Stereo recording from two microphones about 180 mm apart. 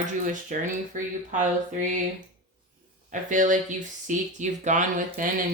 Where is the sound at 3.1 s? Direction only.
45° right (ahead or behind).